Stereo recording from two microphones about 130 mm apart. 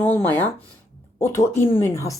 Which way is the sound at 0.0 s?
15° left (ahead or behind).